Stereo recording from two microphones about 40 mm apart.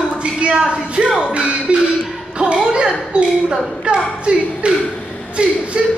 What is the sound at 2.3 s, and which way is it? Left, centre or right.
Music, right.